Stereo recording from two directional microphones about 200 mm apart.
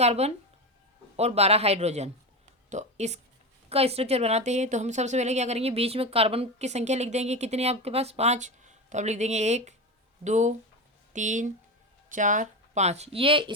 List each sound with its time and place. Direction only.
0.0 s a woman's voice: 30° right (ahead or behind)